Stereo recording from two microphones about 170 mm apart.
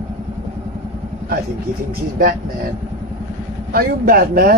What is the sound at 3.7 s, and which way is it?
Speech, 65° right (ahead or behind).